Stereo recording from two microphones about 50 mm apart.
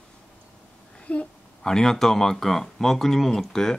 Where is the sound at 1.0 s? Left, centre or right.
Left.